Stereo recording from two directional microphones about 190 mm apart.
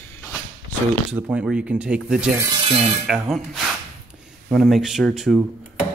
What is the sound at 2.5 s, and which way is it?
Speech, 30° right (ahead or behind).